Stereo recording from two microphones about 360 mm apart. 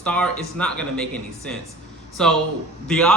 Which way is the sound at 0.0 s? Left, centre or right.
Centre.